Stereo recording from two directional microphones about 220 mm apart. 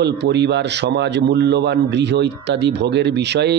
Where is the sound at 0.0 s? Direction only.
50° right (ahead or behind).